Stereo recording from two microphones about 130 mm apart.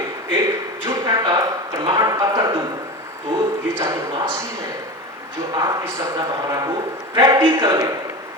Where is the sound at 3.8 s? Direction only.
20° right (ahead or behind).